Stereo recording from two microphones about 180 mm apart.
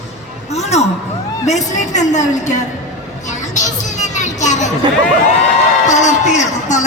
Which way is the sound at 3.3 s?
40° left (ahead or behind).